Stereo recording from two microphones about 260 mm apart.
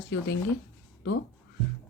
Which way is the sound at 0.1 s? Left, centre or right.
Left.